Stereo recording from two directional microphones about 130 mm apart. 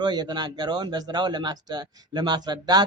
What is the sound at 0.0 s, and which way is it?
Speech, 35° right (ahead or behind).